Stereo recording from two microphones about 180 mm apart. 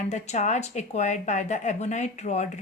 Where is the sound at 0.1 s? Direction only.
40° left (ahead or behind).